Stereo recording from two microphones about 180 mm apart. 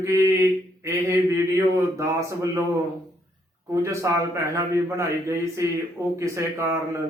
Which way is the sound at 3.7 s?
15° right (ahead or behind).